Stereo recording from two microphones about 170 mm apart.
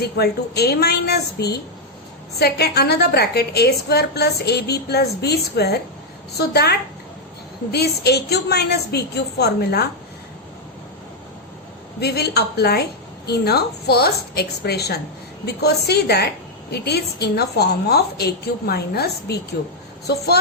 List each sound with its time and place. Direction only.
0.0 s a woman's voice: 70° left (ahead or behind)
11.9 s a woman's voice: 70° left (ahead or behind)